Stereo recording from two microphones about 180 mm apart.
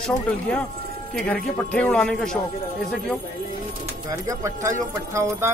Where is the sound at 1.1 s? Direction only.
10° left (ahead or behind).